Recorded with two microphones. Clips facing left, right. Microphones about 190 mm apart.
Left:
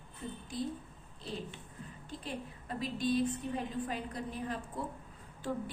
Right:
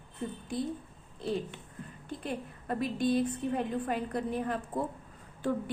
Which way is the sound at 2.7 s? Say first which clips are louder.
Right 4 dB; 55° right (ahead or behind).